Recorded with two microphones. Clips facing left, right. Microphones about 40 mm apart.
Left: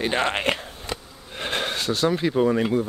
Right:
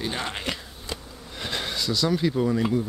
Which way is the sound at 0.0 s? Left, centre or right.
Left.